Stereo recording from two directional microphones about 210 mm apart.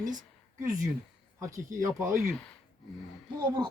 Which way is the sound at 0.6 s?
15° right (ahead or behind).